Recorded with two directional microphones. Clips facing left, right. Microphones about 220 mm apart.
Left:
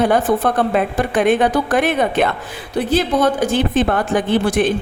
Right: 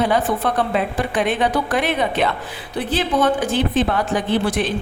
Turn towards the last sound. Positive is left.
turn(degrees=50)  # may be behind; listen again after turning